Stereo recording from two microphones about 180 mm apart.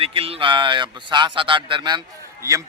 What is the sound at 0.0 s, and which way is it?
A man's voice, 30° right (ahead or behind).